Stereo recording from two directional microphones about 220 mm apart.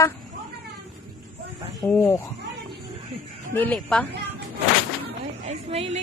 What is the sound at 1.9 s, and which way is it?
Speech, 10° left (ahead or behind).